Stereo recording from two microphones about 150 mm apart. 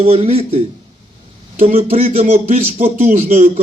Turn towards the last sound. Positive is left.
turn(degrees=-45)  # may be behind; listen again after turning